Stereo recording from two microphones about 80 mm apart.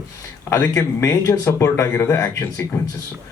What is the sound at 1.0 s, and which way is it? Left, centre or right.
Speech, left.